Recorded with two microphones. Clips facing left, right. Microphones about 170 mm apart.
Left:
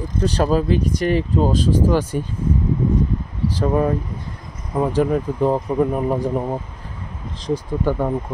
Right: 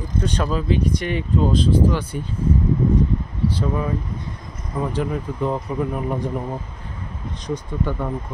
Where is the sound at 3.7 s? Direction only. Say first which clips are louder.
Left 5 dB; 50° left (ahead or behind).